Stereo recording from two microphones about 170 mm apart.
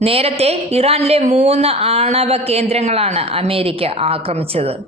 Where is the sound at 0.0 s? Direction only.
35° right (ahead or behind).